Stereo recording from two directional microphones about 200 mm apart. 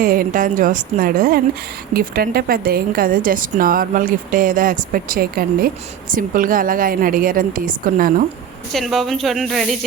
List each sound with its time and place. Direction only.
0.0 s a woman's voice: 45° right (ahead or behind)
8.7 s speech: centre (ahead or behind)